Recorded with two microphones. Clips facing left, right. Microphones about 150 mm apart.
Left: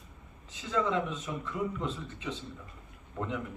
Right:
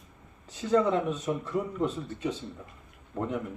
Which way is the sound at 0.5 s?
45° right (ahead or behind).